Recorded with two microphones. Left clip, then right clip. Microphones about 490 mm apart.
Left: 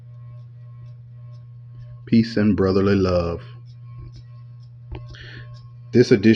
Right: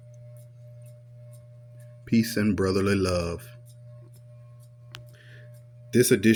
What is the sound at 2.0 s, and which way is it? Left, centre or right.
Speech, right.